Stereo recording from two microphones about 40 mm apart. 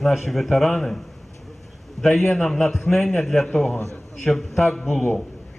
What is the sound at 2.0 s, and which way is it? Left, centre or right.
A man's voice, centre.